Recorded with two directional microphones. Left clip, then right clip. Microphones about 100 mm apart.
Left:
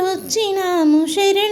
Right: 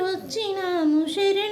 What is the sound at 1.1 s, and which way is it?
Child singing, 40° left (ahead or behind).